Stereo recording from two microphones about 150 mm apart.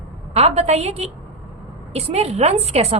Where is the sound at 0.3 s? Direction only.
45° right (ahead or behind).